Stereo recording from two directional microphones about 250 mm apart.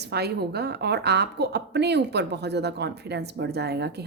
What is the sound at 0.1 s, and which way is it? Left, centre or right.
A woman's voice, right.